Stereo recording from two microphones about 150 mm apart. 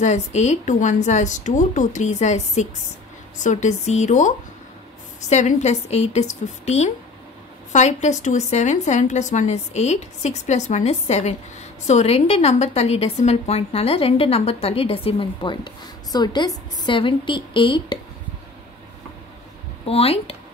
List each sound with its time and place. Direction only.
0.0 s a woman's voice: 50° left (ahead or behind); by 17.9 s 35° left (ahead or behind)
19.9 s a woman's voice: 40° left (ahead or behind)